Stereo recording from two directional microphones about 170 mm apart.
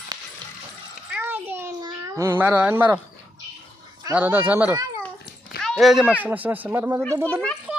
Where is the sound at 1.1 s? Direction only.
10° right (ahead or behind).